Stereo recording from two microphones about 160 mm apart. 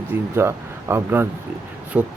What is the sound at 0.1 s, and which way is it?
Speech, 15° right (ahead or behind).